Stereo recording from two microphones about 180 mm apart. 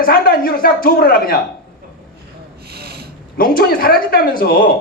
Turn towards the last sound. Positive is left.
turn(degrees=55)  # may be behind; listen again after turning